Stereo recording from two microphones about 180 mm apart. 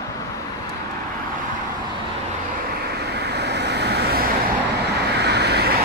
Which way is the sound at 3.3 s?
70° right (ahead or behind).